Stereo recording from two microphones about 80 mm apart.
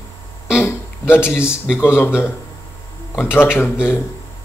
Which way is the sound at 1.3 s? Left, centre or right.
Left.